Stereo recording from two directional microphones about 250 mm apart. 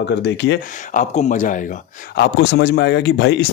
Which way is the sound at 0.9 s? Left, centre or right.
Left.